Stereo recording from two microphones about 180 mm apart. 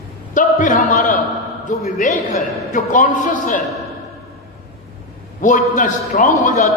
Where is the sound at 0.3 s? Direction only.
45° left (ahead or behind).